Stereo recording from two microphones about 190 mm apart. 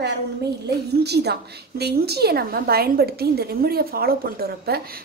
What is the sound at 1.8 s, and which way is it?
A woman's voice, 60° right (ahead or behind).